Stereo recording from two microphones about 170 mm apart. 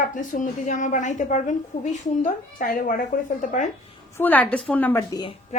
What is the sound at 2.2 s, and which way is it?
A woman's voice, 55° left (ahead or behind).